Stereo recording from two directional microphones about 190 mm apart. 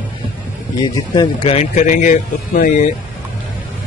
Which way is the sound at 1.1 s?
30° left (ahead or behind).